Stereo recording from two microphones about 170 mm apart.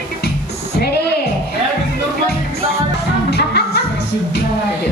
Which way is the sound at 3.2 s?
75° left (ahead or behind).